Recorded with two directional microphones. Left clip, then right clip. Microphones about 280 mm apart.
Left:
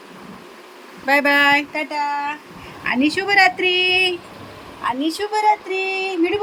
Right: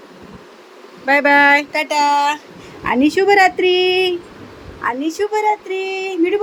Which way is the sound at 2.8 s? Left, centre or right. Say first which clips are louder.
Right 5 dB; centre.